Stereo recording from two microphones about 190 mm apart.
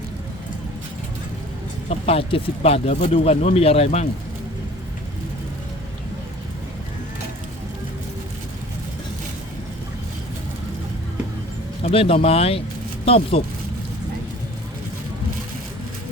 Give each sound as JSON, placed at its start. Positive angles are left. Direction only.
{"t": 1.9, "sound": "speech", "side_deg": 30}
{"t": 11.8, "sound": "speech", "side_deg": 30}